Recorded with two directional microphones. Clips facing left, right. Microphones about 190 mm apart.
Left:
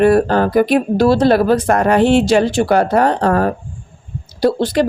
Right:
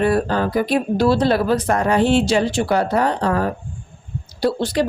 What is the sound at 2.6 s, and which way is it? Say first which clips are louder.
Speech: left 5 dB; 50° left (ahead or behind).